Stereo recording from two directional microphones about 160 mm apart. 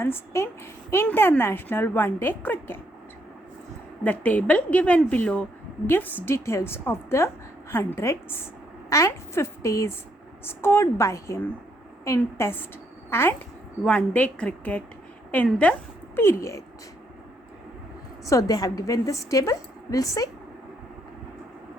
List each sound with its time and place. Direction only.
0.0 s speech: 15° left (ahead or behind)
4.0 s a woman's voice: 10° left (ahead or behind)
18.3 s a woman's voice: 20° left (ahead or behind)